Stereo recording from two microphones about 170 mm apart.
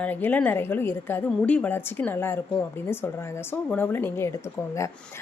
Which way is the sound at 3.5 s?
10° left (ahead or behind).